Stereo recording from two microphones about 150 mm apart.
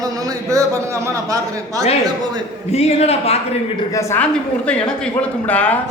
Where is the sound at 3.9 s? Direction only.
10° left (ahead or behind).